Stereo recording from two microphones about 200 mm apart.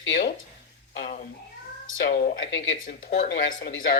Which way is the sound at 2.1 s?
50° left (ahead or behind).